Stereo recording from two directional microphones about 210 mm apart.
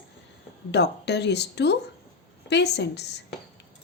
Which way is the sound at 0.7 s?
55° left (ahead or behind).